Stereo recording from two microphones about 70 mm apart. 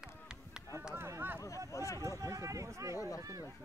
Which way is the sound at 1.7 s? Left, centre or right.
Left.